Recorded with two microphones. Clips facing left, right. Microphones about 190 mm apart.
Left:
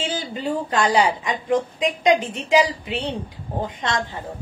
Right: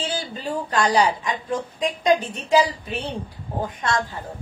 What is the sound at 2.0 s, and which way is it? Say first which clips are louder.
Speech: left 1 dB; 90° left.